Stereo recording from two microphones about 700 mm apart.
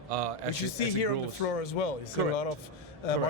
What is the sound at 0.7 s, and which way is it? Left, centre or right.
A man's voice, left.